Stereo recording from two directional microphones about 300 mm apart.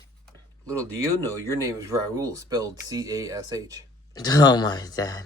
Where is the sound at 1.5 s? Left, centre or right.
Centre.